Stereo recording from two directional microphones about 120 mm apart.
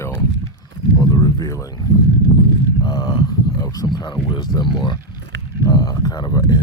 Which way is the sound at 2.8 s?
35° left (ahead or behind).